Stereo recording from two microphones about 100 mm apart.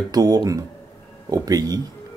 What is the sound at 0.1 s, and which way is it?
Speech, 40° right (ahead or behind).